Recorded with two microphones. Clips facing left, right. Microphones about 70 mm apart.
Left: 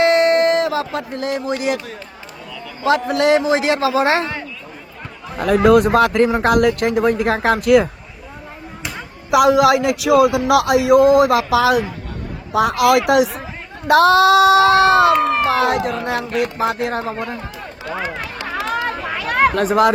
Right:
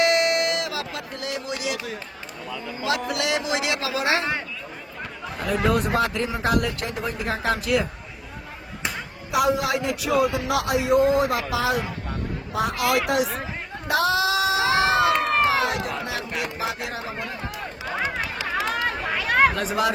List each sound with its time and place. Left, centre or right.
0.0 s a sound: left
0.9 s speech: left
3.1 s speech: left
5.6 s speech: left
9.3 s a man's voice: left
13.8 s speech: left
15.1 s speech: centre
15.4 s speech: left
15.8 s speech: centre
16.6 s speech: left
18.0 s a sound: centre
19.5 s speech: left